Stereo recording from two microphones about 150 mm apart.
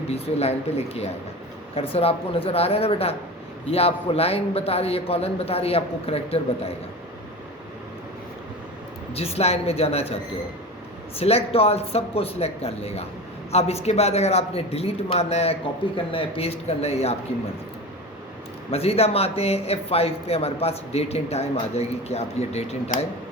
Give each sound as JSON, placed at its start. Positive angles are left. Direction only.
{"t": 0.1, "sound": "a man's voice", "side_deg": 45}
{"t": 9.1, "sound": "a man's voice", "side_deg": 40}
{"t": 11.2, "sound": "a man's voice", "side_deg": 40}
{"t": 18.7, "sound": "a man's voice", "side_deg": 40}